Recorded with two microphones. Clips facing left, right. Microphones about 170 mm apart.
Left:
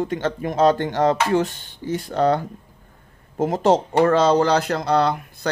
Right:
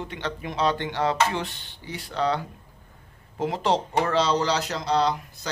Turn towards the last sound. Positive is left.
turn(degrees=55)  # may be behind; listen again after turning